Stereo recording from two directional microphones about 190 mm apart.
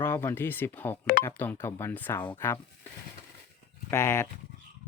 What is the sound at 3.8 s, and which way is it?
Speech, 15° left (ahead or behind).